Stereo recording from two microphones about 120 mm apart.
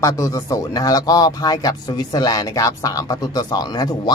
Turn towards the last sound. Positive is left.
turn(degrees=35)  # may be behind; listen again after turning